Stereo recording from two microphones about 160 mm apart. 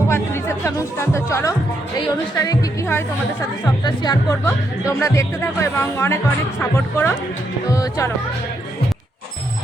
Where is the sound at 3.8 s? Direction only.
25° left (ahead or behind).